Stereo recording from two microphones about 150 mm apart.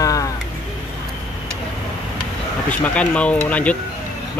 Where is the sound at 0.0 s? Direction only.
25° left (ahead or behind).